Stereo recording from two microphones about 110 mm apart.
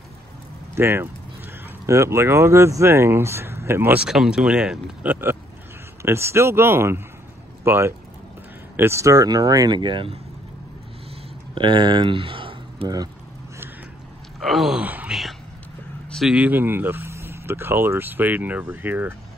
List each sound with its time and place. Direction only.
0.7 s speech: 20° right (ahead or behind)
4.0 s speech: 5° right (ahead or behind); by 10.1 s 45° right (ahead or behind)
11.5 s speech: 50° right (ahead or behind)
12.8 s speech: 35° right (ahead or behind)
14.4 s gasp: centre (ahead or behind)
14.8 s speech: 15° right (ahead or behind)
16.1 s vehicle: centre (ahead or behind)
16.3 s speech: 15° right (ahead or behind)